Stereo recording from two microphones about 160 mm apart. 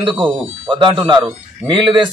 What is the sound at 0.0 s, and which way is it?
A man's voice, 30° right (ahead or behind).